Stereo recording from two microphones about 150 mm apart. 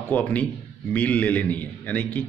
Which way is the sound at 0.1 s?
10° left (ahead or behind).